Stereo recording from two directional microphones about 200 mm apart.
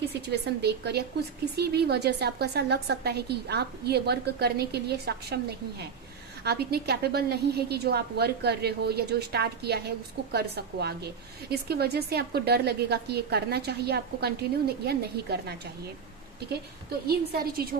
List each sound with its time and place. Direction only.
0.3 s a woman's voice: 55° right (ahead or behind)
17.1 s a woman's voice: 50° right (ahead or behind)